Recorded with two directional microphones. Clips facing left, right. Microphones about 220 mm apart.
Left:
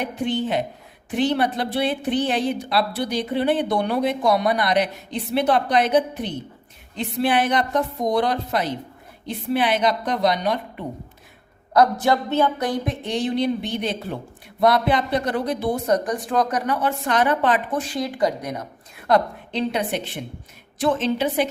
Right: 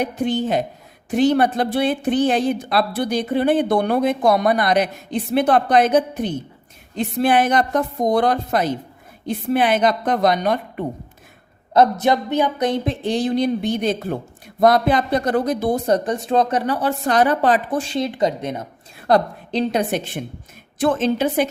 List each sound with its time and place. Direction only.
0.0 s a woman's voice: 40° right (ahead or behind)
11.7 s a woman's voice: 20° right (ahead or behind); by 15.8 s 45° right (ahead or behind)
15.9 s a woman's voice: 25° right (ahead or behind); by 21.4 s 45° right (ahead or behind)